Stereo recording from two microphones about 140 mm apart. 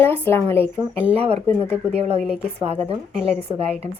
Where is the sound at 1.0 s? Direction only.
45° right (ahead or behind).